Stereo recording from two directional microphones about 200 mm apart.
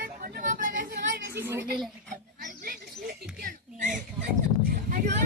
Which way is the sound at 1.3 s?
10° right (ahead or behind).